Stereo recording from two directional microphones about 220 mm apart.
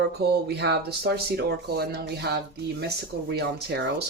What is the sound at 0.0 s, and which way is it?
Speech, 50° right (ahead or behind).